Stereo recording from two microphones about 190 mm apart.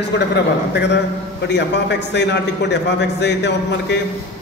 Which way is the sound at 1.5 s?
65° left (ahead or behind).